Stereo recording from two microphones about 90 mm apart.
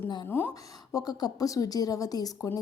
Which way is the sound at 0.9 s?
45° left (ahead or behind).